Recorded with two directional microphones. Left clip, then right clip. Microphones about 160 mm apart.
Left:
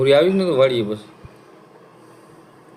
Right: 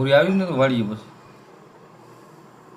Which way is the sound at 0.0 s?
90° left.